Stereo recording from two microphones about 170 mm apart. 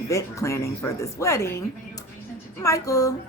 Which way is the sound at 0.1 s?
20° left (ahead or behind).